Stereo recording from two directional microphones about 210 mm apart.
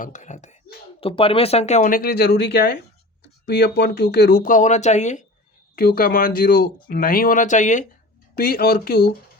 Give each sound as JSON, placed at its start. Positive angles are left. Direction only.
{"t": 0.0, "sound": "speech", "side_deg": 35}
{"t": 5.7, "sound": "speech", "side_deg": 45}
{"t": 8.4, "sound": "speech", "side_deg": 45}